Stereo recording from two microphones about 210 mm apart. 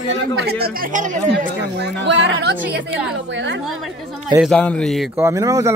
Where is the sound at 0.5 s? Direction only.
50° right (ahead or behind).